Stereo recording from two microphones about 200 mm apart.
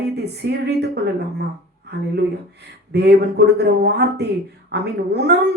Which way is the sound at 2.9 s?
55° right (ahead or behind).